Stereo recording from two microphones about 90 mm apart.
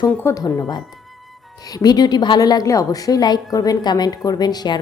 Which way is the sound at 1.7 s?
50° left (ahead or behind).